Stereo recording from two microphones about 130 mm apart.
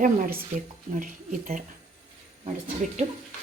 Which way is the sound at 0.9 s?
90° right.